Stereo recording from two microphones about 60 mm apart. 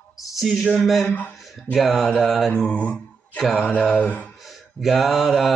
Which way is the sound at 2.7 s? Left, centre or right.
Left.